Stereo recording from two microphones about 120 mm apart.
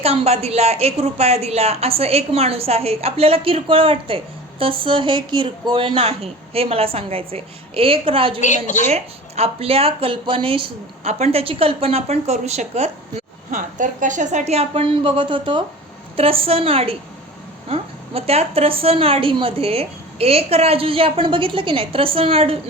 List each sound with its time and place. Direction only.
0.0 s a woman's voice: 60° right (ahead or behind)
8.4 s a woman's voice: 90° left
8.9 s speech: 60° right (ahead or behind)
13.7 s a woman's voice: 90° right; by 22.5 s 50° right (ahead or behind)